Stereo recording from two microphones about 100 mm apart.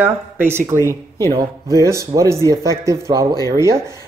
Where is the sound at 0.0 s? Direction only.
20° right (ahead or behind).